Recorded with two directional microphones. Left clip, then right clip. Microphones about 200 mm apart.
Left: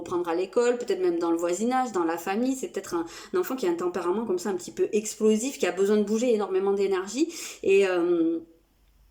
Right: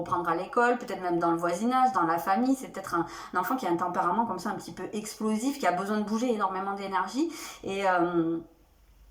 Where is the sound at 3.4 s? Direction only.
50° left (ahead or behind).